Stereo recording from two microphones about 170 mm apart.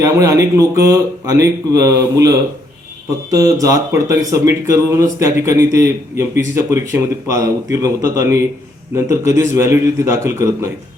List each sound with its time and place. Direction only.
0.0 s speech: 15° right (ahead or behind)